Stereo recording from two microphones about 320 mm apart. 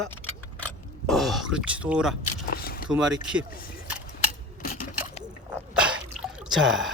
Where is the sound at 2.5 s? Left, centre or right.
Left.